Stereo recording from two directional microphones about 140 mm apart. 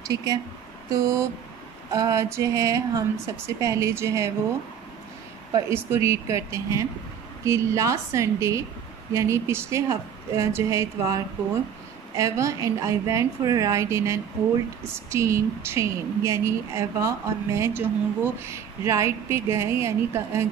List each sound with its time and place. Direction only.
0.1 s a woman's voice: 25° right (ahead or behind)
5.7 s a woman's voice: 15° right (ahead or behind)
12.2 s a woman's voice: 20° right (ahead or behind)